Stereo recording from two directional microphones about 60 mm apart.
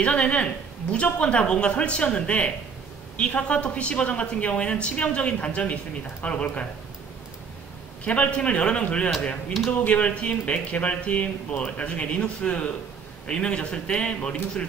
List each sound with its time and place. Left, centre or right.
0.0 s a woman's voice: centre
8.0 s a woman's voice: left